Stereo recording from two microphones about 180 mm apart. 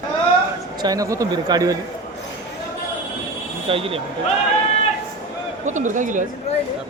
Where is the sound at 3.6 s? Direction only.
30° right (ahead or behind).